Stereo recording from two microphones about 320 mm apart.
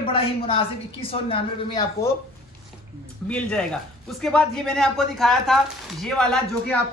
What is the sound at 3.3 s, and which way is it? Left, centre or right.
Speech, centre.